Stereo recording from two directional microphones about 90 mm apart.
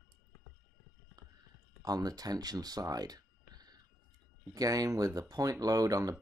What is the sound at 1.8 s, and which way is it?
Speech, 45° right (ahead or behind).